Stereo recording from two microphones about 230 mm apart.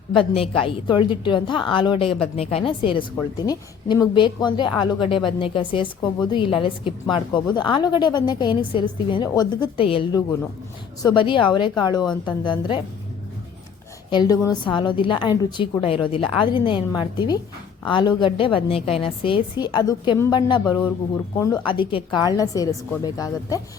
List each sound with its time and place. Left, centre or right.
0.1 s a woman's voice: left
14.1 s a woman's voice: centre